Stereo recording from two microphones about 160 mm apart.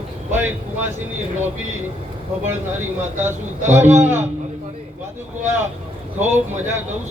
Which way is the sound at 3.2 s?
15° right (ahead or behind).